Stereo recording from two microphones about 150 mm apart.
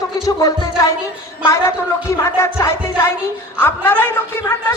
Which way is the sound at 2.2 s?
20° left (ahead or behind).